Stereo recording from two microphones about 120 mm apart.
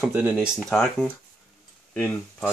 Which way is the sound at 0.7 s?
5° left (ahead or behind).